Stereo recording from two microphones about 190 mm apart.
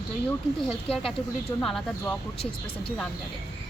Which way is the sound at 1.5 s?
5° left (ahead or behind).